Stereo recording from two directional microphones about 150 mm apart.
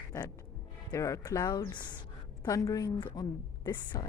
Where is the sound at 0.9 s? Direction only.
20° left (ahead or behind).